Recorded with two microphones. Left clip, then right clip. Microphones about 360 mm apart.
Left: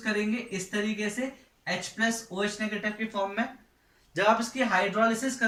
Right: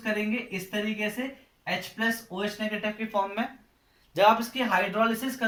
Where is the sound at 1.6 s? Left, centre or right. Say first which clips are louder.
Even; centre.